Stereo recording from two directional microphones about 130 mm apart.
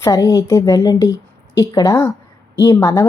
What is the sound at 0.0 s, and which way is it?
Speech, 25° left (ahead or behind).